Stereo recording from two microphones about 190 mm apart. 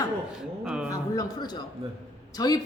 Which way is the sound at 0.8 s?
20° left (ahead or behind).